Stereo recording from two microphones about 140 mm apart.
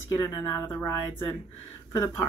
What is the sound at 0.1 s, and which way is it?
Speech, 25° left (ahead or behind).